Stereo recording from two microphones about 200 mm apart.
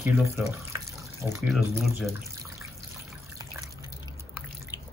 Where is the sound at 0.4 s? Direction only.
15° right (ahead or behind).